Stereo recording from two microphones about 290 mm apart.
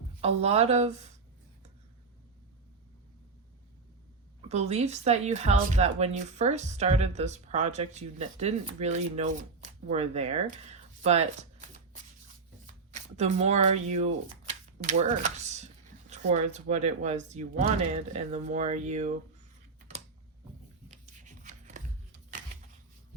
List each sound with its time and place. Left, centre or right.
0.2 s a woman's voice: right
4.4 s a woman's voice: right
12.9 s a woman's voice: right
20.8 s a sound: right